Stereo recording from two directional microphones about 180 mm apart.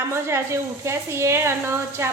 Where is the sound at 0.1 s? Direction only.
15° right (ahead or behind).